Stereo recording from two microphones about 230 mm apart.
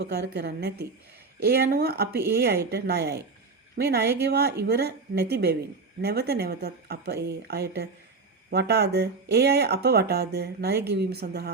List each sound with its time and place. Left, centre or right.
0.0 s speech: right